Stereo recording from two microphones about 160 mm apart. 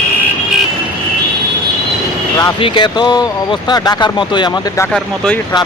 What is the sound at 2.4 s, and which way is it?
Speech, 30° left (ahead or behind).